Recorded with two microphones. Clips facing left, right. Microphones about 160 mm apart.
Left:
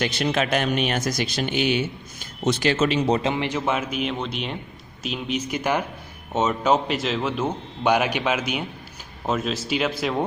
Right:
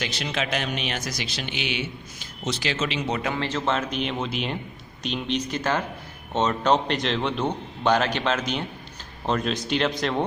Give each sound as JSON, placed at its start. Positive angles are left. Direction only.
{"t": 0.0, "sound": "speech", "side_deg": 50}
{"t": 3.2, "sound": "a man's voice", "side_deg": 20}